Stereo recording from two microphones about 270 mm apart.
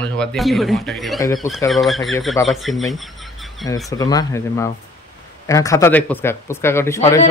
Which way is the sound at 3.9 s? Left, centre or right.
Centre.